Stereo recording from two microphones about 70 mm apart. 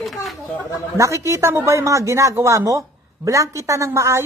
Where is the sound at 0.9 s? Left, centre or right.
Right.